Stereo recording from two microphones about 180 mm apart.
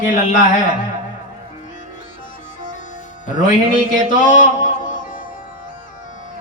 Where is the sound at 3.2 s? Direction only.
45° left (ahead or behind).